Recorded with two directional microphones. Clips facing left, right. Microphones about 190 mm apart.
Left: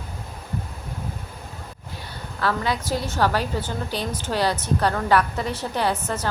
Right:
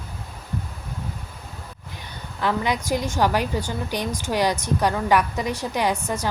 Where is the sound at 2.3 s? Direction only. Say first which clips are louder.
Right 1 dB; 15° right (ahead or behind).